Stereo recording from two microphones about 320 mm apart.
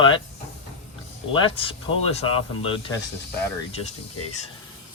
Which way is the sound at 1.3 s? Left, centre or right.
Centre.